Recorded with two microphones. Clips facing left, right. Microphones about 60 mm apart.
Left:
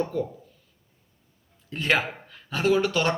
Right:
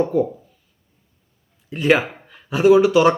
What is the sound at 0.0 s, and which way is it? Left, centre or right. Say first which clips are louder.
Speech: right 9 dB; centre.